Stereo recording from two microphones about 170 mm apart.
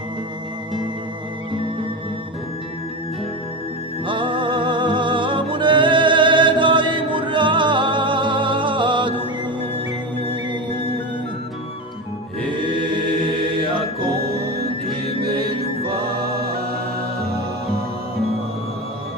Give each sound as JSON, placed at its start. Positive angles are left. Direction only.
{"t": 4.0, "sound": "music", "side_deg": -30}
{"t": 10.2, "sound": "music", "side_deg": -30}
{"t": 12.5, "sound": "chant", "side_deg": -30}
{"t": 14.2, "sound": "music", "side_deg": -65}